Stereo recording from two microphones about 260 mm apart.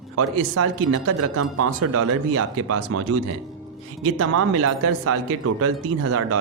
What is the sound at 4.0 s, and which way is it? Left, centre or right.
Speech, right.